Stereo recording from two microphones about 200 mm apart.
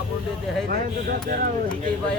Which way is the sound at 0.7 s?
45° right (ahead or behind).